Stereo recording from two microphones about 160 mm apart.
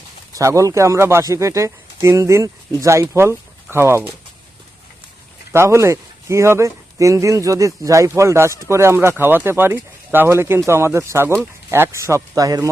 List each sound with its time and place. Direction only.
0.3 s speech: 20° right (ahead or behind)
5.5 s a man's voice: 15° right (ahead or behind)